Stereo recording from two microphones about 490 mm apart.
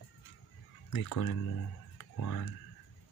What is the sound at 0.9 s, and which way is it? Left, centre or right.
Speech, left.